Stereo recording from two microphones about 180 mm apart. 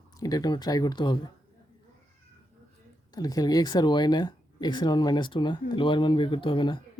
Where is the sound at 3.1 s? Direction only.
20° left (ahead or behind).